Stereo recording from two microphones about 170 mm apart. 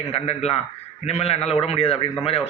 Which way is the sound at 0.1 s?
35° left (ahead or behind).